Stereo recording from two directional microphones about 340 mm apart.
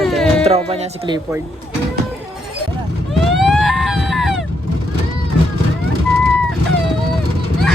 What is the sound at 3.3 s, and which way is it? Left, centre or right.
Screaming, centre.